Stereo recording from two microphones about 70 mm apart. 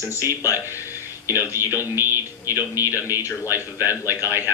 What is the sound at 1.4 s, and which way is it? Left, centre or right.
Speech, right.